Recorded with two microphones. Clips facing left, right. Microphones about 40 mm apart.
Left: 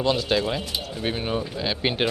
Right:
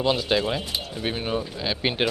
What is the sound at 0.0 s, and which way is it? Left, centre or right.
A man's voice, centre.